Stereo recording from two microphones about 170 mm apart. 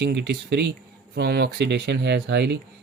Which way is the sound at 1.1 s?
70° right (ahead or behind).